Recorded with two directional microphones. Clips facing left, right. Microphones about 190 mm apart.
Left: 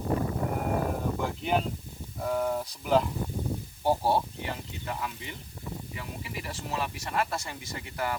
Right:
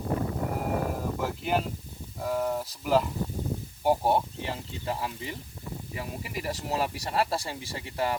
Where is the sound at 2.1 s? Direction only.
Centre (ahead or behind).